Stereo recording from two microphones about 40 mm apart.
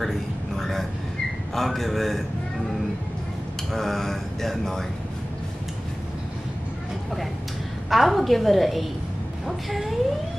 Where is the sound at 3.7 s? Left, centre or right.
Centre.